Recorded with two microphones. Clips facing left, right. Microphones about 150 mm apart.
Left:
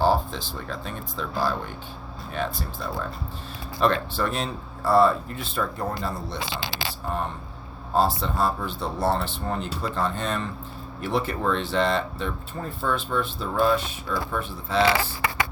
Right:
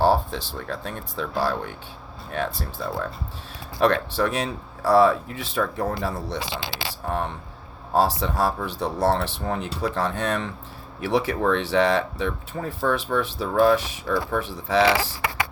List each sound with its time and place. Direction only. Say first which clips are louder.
0.0 s speech: right 2 dB; 65° right (ahead or behind)